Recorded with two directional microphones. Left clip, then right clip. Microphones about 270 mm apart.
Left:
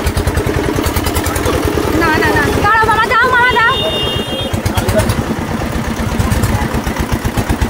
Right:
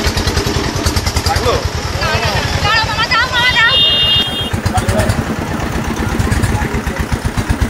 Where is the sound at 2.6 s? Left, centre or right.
Left.